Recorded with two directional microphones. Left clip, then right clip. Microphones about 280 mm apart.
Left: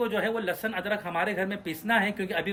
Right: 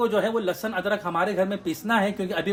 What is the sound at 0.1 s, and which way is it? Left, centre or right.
Speech, centre.